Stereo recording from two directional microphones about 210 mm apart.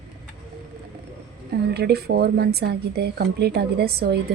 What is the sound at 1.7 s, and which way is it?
Speech, 50° right (ahead or behind).